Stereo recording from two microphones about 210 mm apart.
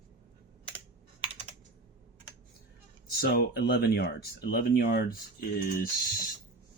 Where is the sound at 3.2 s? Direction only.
50° left (ahead or behind).